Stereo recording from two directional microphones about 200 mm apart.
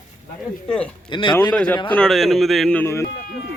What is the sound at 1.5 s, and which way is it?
Speech, 5° left (ahead or behind).